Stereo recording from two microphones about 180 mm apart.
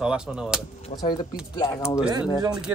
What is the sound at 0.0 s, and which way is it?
Speech, 5° right (ahead or behind).